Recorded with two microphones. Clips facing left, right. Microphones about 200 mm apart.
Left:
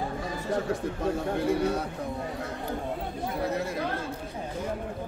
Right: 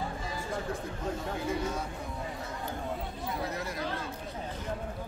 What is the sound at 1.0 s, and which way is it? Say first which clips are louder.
Speech: left 7 dB; 65° left (ahead or behind).